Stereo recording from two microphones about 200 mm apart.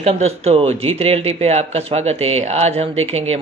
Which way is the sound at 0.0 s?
30° right (ahead or behind).